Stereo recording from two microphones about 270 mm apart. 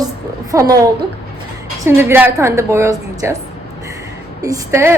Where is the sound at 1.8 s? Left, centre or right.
Centre.